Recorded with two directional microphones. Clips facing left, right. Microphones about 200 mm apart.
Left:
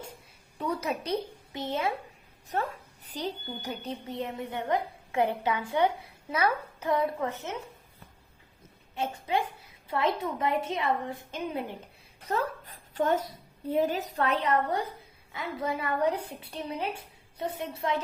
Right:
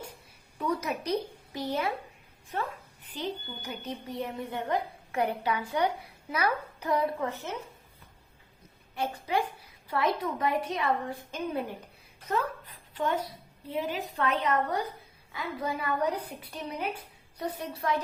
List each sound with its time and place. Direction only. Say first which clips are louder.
0.6 s a woman's voice: even; 30° left (ahead or behind)
2.5 s a woman's voice: left 3 dB; 40° left (ahead or behind)
4.1 s a woman's voice: even; 20° left (ahead or behind)
9.0 s a woman's voice: even; 25° left (ahead or behind)
12.3 s a woman's voice: even; 40° left (ahead or behind); by 18.0 s 25° left (ahead or behind)